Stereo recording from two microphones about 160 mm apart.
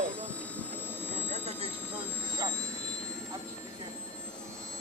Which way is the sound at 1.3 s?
40° right (ahead or behind).